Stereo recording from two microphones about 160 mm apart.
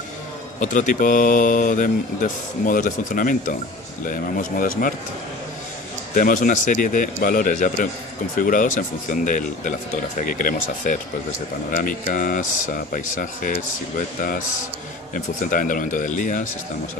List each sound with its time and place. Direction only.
0.6 s speech: 55° left (ahead or behind)
6.1 s speech: 55° left (ahead or behind)
15.1 s speech: 55° left (ahead or behind)